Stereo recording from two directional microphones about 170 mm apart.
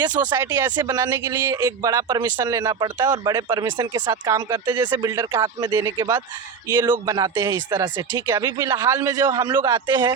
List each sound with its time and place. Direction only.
0.0 s speech: 25° right (ahead or behind)